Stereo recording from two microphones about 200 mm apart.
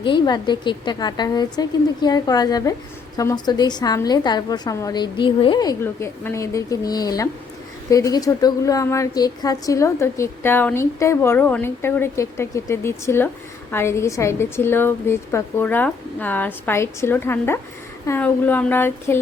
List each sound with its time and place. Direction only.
0.0 s a woman's voice: 25° left (ahead or behind)